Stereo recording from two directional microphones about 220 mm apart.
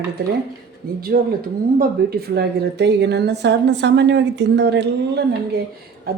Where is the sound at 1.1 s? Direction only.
40° right (ahead or behind).